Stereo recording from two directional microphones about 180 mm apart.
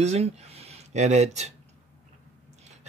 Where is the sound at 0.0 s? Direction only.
35° right (ahead or behind).